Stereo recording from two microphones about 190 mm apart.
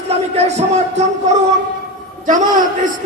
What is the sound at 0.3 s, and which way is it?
Speech, 35° right (ahead or behind).